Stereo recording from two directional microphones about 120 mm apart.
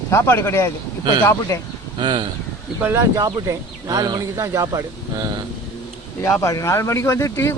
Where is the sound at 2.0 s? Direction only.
40° right (ahead or behind).